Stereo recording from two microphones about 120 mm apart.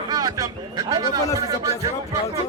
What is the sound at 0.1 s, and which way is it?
Speech, 30° right (ahead or behind).